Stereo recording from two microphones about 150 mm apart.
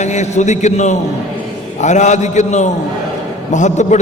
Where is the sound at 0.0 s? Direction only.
50° left (ahead or behind).